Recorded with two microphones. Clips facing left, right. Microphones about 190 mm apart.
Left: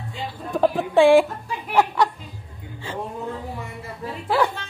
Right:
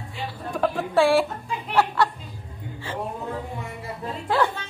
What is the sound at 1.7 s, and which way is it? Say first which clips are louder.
Chuckle: left 2 dB; 15° left (ahead or behind).